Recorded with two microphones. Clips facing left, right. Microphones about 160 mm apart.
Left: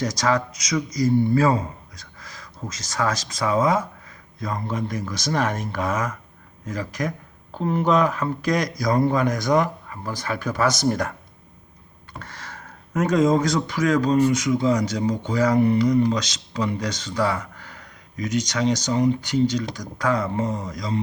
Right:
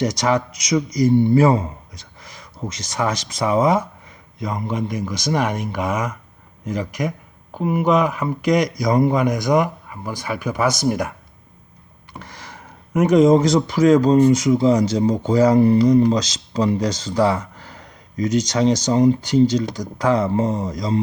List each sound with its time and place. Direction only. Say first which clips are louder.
0.0 s speech: right 3 dB; 20° right (ahead or behind)
12.2 s speech: right 1 dB; 15° right (ahead or behind); by 21.0 s 35° right (ahead or behind)